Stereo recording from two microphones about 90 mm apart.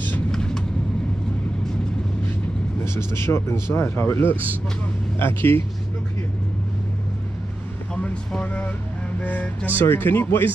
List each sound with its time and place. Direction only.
2.8 s speech: 30° left (ahead or behind)
7.9 s vehicle: 10° left (ahead or behind)
9.2 s speech: 15° left (ahead or behind)